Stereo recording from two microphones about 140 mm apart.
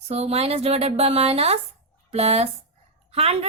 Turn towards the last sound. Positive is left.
turn(degrees=-45)  # may be behind; listen again after turning